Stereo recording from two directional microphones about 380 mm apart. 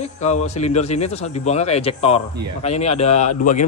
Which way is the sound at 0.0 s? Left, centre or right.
Centre.